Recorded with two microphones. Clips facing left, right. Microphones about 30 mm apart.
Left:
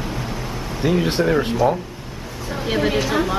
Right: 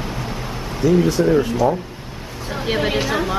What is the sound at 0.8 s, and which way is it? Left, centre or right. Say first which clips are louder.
Speech: right 4 dB; left.